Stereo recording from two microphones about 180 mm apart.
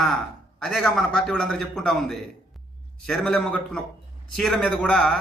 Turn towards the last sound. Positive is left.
turn(degrees=5)  # may be behind; listen again after turning